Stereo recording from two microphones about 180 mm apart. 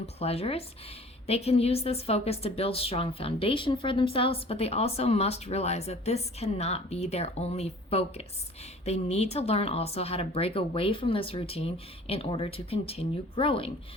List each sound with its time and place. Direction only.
0.0 s a woman's voice: 35° left (ahead or behind)